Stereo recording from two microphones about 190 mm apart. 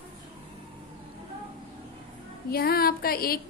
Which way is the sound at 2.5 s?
55° left (ahead or behind).